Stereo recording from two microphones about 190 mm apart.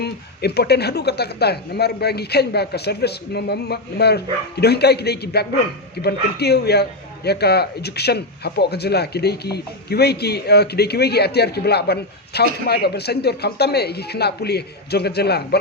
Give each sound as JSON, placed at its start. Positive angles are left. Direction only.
{"t": 0.0, "sound": "speech", "side_deg": 60}